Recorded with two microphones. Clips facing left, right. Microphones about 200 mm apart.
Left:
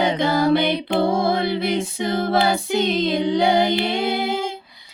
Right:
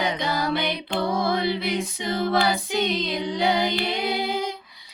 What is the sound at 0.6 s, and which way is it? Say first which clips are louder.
Music: left 7 dB; 30° left (ahead or behind).